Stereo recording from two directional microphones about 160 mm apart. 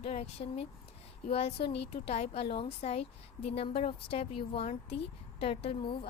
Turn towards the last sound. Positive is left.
turn(degrees=35)  # may be behind; listen again after turning